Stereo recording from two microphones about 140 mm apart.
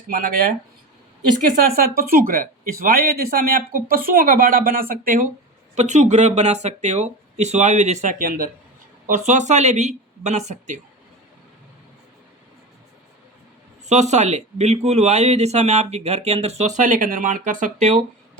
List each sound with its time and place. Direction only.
0.1 s speech: 90° right
1.7 s speech: 90° right
5.7 s speech: 55° right (ahead or behind)
8.2 s speech: 80° right
9.0 s speech: 65° right (ahead or behind)
13.8 s speech: 55° right (ahead or behind)